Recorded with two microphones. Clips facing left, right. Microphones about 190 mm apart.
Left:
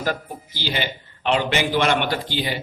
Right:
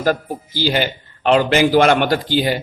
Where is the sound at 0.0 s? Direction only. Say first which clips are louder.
Right 7 dB; 40° right (ahead or behind).